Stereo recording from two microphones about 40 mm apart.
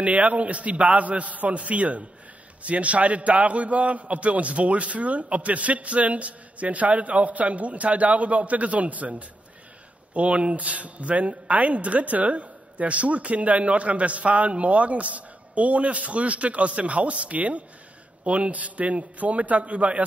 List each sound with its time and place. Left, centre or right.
0.0 s speech: right
10.1 s speech: right